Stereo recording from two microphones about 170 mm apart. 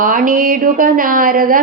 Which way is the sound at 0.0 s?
55° right (ahead or behind).